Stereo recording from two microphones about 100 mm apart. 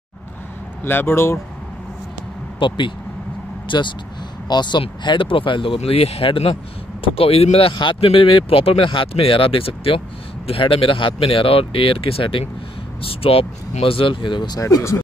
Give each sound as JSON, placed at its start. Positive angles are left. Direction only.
{"t": 0.8, "sound": "speech", "side_deg": 25}
{"t": 2.6, "sound": "speech", "side_deg": 60}
{"t": 7.7, "sound": "speech", "side_deg": 55}
{"t": 14.6, "sound": "speech", "side_deg": 30}